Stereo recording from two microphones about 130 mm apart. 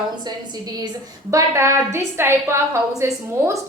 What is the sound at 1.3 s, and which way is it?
A woman's voice, 25° right (ahead or behind).